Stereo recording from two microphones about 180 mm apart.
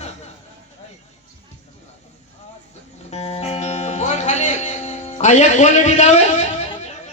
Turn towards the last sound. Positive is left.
turn(degrees=40)  # may be behind; listen again after turning